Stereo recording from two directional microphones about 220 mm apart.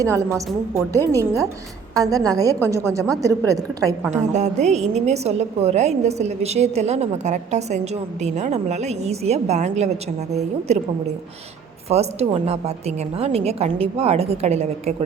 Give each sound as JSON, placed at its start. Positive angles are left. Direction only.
{"t": 0.0, "sound": "a woman's voice", "side_deg": -15}
{"t": 4.1, "sound": "a woman's voice", "side_deg": -30}
{"t": 11.9, "sound": "a woman's voice", "side_deg": -30}